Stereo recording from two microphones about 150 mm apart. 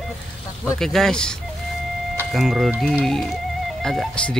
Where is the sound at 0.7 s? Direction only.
5° left (ahead or behind).